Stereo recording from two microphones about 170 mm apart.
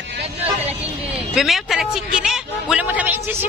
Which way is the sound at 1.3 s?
Centre (ahead or behind).